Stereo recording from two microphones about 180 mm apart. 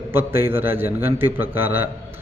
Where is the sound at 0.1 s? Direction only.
15° right (ahead or behind).